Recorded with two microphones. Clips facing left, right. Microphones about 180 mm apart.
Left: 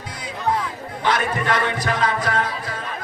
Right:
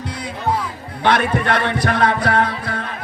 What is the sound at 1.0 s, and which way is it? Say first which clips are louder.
Music: right 4 dB; 65° right (ahead or behind).